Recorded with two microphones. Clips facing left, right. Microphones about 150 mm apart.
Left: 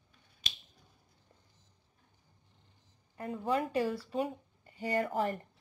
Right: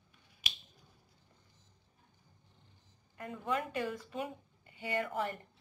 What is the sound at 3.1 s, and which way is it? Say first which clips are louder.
Speech: left 4 dB; 35° left (ahead or behind).